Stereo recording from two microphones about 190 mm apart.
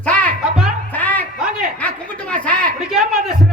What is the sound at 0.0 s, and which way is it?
Music, 5° left (ahead or behind).